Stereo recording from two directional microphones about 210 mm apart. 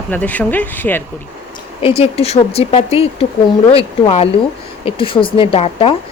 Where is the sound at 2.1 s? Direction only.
30° left (ahead or behind).